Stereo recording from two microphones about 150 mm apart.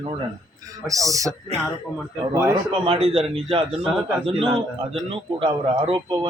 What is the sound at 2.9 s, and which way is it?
Speech, 40° right (ahead or behind).